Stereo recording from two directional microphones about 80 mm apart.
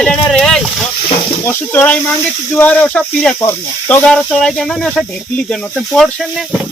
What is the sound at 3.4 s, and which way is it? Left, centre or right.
Speech, left.